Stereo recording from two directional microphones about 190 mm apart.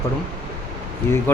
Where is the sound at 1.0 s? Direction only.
15° left (ahead or behind).